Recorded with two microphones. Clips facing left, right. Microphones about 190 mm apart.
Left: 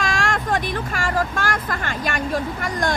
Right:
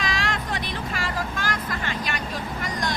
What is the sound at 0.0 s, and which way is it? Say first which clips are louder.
Speech: left 5 dB; 50° left (ahead or behind).